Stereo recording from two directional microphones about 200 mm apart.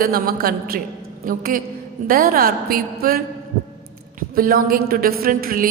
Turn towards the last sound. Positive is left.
turn(degrees=-45)  # may be behind; listen again after turning